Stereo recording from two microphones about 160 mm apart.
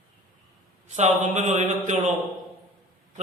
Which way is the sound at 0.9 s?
45° right (ahead or behind).